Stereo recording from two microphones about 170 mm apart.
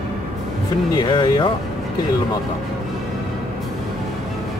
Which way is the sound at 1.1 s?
30° left (ahead or behind).